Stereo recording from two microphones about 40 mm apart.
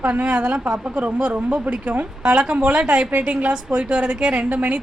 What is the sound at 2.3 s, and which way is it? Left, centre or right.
A woman's voice, right.